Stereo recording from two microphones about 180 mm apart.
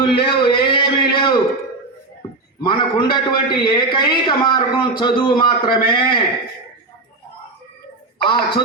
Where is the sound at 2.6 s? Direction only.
25° left (ahead or behind).